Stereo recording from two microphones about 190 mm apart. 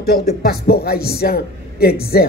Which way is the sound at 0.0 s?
55° left (ahead or behind).